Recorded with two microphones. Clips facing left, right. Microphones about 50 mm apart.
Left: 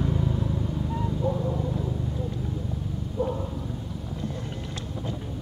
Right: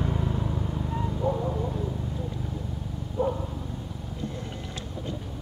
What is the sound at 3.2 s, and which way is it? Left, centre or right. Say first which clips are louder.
Dog: right 1 dB; centre.